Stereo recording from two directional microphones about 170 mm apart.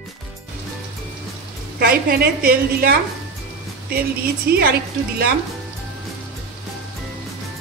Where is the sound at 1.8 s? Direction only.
65° right (ahead or behind).